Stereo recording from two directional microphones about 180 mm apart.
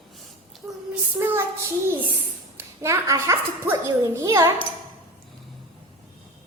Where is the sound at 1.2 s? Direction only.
10° right (ahead or behind).